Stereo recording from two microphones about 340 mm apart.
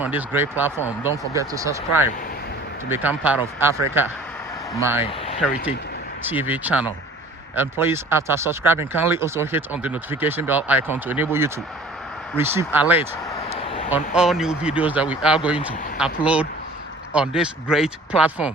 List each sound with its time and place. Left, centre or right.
0.0 s speech: centre
5.1 s a sound: centre
6.2 s speech: centre